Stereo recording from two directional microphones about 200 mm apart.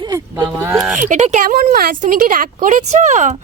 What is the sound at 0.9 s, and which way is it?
A woman's voice, 40° right (ahead or behind).